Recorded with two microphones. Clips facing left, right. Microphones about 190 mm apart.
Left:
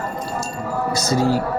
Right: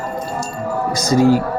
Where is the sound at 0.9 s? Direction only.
15° right (ahead or behind).